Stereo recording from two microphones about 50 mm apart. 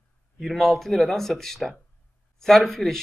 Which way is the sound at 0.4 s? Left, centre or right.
Centre.